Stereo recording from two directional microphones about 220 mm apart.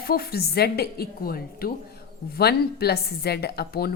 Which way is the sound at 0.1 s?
45° left (ahead or behind).